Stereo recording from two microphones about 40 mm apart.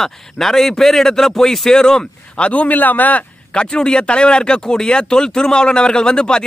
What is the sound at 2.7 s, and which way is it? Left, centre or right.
Speech, left.